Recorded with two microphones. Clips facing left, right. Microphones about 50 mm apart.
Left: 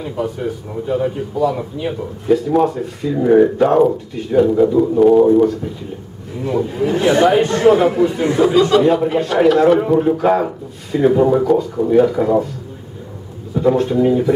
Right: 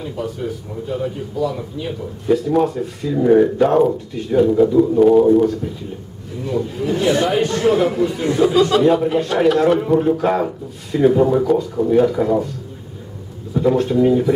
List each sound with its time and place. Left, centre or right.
0.0 s a man's voice: centre
2.2 s speech: centre
6.4 s speech: centre
8.5 s speech: centre
13.6 s speech: centre